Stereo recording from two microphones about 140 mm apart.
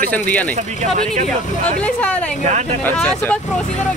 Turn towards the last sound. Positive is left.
turn(degrees=10)  # may be behind; listen again after turning